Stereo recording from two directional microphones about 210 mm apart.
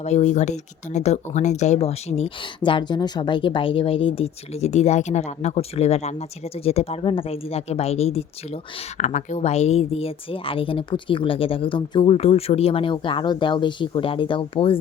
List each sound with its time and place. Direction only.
0.0 s speech: 30° left (ahead or behind)